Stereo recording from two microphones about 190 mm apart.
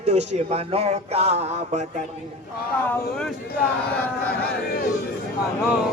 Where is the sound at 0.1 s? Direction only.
35° right (ahead or behind).